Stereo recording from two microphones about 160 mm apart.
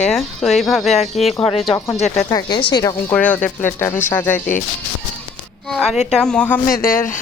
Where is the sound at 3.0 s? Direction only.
10° left (ahead or behind).